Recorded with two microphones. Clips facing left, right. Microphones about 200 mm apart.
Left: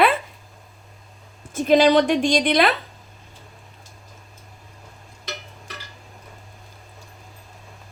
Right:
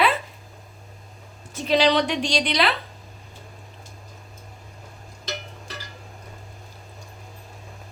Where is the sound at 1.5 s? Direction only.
50° left (ahead or behind).